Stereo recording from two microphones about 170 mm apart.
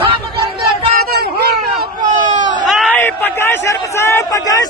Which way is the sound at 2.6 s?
Centre (ahead or behind).